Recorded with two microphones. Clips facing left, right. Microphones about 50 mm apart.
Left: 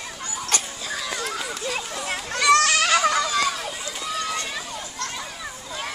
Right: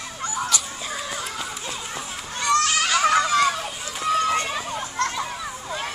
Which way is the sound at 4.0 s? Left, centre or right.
Right.